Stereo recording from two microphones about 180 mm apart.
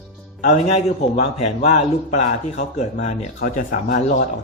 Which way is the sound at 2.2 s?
40° left (ahead or behind).